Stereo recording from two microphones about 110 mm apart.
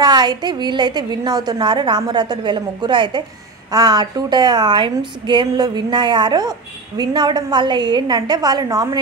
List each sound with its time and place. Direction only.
0.0 s a woman's voice: 40° right (ahead or behind)